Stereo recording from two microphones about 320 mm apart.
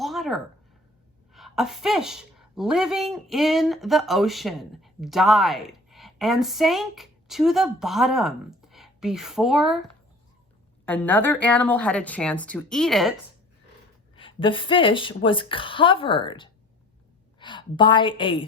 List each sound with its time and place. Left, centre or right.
0.0 s a sound: centre
1.3 s speech: centre
10.8 s a woman's voice: centre
14.2 s a woman's voice: centre